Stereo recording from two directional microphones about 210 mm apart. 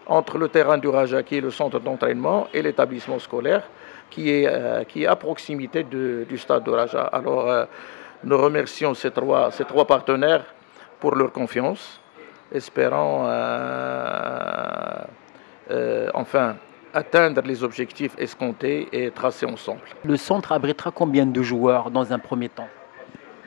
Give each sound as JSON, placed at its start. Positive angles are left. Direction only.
{"t": 0.1, "sound": "a man's voice", "side_deg": 15}
{"t": 4.2, "sound": "a man's voice", "side_deg": 10}
{"t": 12.7, "sound": "a man's voice", "side_deg": 15}